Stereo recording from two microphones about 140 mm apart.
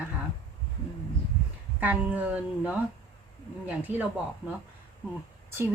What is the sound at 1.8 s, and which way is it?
Speech, 10° right (ahead or behind).